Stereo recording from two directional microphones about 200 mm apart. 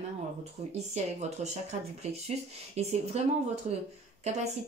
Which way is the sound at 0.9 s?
35° right (ahead or behind).